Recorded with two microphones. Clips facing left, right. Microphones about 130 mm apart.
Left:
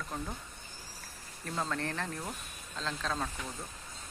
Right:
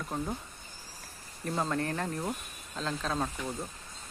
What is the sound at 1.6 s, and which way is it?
Speech, 15° right (ahead or behind).